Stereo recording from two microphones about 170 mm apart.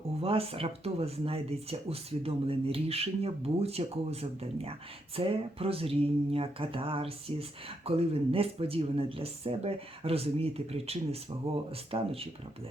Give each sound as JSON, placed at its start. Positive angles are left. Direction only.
{"t": 0.2, "sound": "speech", "side_deg": -35}